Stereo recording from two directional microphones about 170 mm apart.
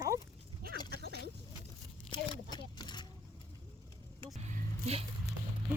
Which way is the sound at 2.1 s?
25° left (ahead or behind).